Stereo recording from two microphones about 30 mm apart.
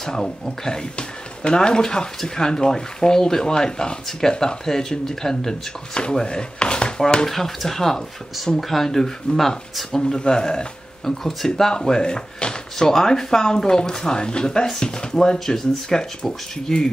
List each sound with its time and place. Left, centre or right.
0.0 s speech: centre
0.9 s speech: left
6.2 s chopping: left
7.2 s speech: centre; by 10.7 s left
11.1 s speech: centre
11.8 s speech: left
12.7 s speech: centre
15.3 s speech: centre